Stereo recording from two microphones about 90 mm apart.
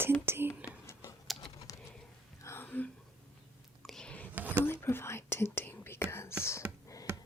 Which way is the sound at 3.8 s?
5° left (ahead or behind).